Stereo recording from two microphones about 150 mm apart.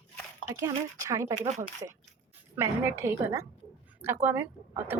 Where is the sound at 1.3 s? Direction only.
50° right (ahead or behind).